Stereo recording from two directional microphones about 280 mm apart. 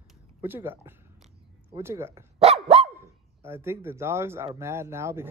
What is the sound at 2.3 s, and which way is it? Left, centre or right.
Dog, right.